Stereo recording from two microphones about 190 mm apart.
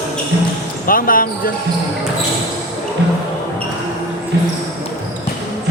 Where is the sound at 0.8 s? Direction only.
50° left (ahead or behind).